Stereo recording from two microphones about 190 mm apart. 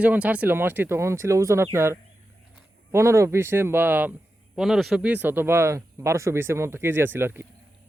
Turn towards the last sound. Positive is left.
turn(degrees=-10)  # may be behind; listen again after turning